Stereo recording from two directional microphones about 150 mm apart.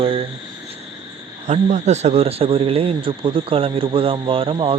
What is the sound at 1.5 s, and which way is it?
Speech, 50° right (ahead or behind).